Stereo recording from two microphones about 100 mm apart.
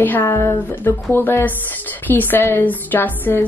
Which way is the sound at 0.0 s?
20° left (ahead or behind).